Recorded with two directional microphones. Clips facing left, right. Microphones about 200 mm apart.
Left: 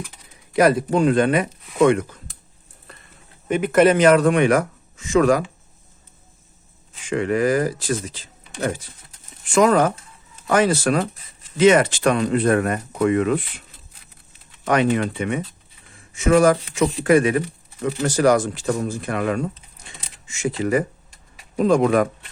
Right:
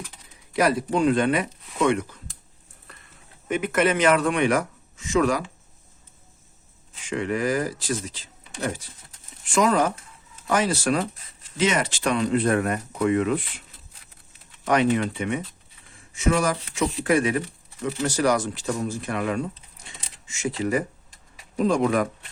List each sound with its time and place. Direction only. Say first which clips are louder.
0.5 s speech: left 5 dB; 50° left (ahead or behind)
3.5 s speech: left 7 dB; 35° left (ahead or behind); by 5.5 s 50° left (ahead or behind)
7.1 s speech: left 5 dB; 55° left (ahead or behind)
14.6 s speech: left 2 dB; 60° left (ahead or behind)
21.8 s speech: left 4 dB; 75° left (ahead or behind)